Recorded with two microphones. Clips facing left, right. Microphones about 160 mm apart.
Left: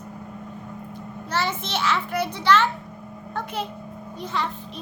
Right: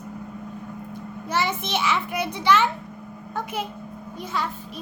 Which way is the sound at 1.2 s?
10° right (ahead or behind).